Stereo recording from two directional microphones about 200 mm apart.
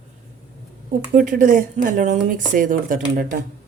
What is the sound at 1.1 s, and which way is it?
A woman's voice, 40° right (ahead or behind).